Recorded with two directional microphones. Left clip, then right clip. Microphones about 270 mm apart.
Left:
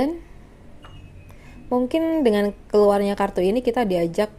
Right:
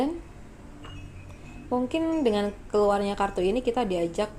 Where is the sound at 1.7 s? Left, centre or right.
Left.